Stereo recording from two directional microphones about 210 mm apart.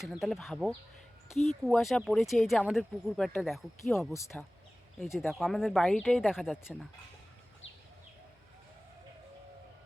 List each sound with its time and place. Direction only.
0.0 s speech: centre (ahead or behind)